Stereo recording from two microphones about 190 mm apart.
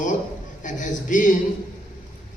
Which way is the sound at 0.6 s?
40° left (ahead or behind).